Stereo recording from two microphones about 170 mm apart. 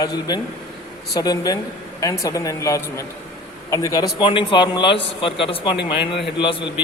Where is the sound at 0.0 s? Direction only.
25° left (ahead or behind).